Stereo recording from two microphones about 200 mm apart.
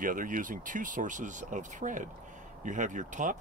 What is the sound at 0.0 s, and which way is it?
Speech, 40° right (ahead or behind).